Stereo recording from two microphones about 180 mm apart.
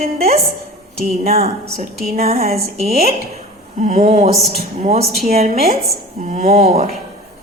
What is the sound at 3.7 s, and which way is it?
A woman's voice, 40° right (ahead or behind).